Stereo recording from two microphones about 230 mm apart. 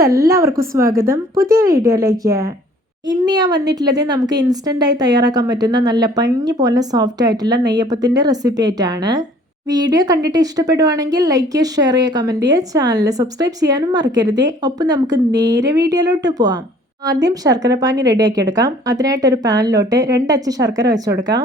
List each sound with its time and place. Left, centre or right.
0.0 s a woman's voice: centre